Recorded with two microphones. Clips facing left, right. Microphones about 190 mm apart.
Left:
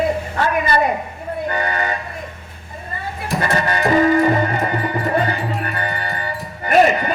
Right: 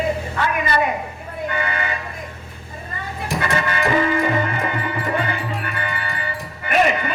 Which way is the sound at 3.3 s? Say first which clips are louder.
Left 3 dB; 40° left (ahead or behind).